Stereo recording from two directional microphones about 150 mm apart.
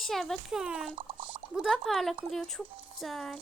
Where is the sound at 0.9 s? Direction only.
35° right (ahead or behind).